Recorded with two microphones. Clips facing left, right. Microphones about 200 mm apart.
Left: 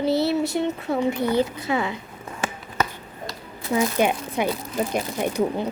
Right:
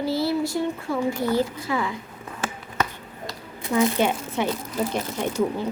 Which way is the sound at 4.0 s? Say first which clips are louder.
Left 1 dB; 15° left (ahead or behind).